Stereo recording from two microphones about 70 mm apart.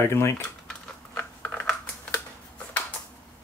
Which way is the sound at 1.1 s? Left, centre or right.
Left.